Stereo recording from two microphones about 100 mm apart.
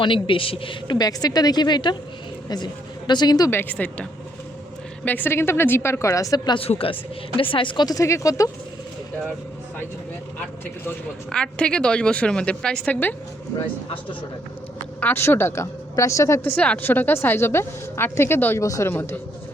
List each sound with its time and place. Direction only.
0.0 s a woman's voice: 60° left (ahead or behind)
0.9 s a woman's voice: 40° left (ahead or behind)
3.1 s a woman's voice: 45° left (ahead or behind)
3.5 s a woman's voice: 20° left (ahead or behind)
5.0 s a woman's voice: 20° left (ahead or behind); by 6.6 s 40° left (ahead or behind)
6.6 s a woman's voice: 70° left (ahead or behind)
7.9 s speech: 35° left (ahead or behind)
11.3 s a woman's voice: 10° left (ahead or behind)
15.0 s a woman's voice: 20° left (ahead or behind)
16.4 s a woman's voice: 15° left (ahead or behind)